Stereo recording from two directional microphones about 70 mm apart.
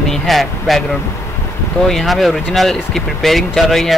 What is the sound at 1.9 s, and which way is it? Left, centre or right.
Speech, centre.